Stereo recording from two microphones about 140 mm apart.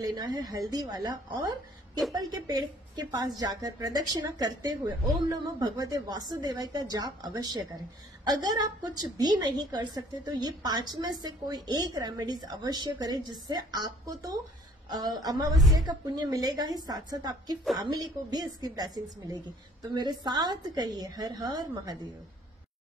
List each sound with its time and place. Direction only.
0.0 s a woman's voice: 30° right (ahead or behind)